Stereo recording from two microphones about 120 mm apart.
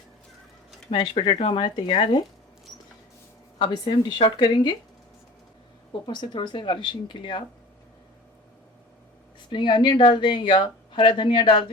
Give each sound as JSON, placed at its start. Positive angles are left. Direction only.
{"t": 0.9, "sound": "speech", "side_deg": 45}
{"t": 3.6, "sound": "speech", "side_deg": 40}
{"t": 6.1, "sound": "speech", "side_deg": 40}
{"t": 9.5, "sound": "speech", "side_deg": 40}